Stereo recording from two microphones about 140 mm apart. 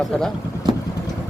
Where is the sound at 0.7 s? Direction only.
30° right (ahead or behind).